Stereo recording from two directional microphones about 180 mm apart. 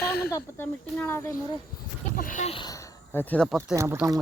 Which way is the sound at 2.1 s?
50° left (ahead or behind).